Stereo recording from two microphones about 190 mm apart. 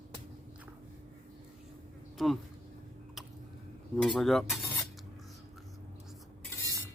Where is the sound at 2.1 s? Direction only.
Centre (ahead or behind).